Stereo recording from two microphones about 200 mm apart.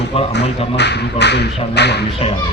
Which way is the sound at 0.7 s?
55° left (ahead or behind).